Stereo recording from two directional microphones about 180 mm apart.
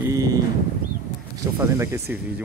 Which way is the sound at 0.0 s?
20° right (ahead or behind).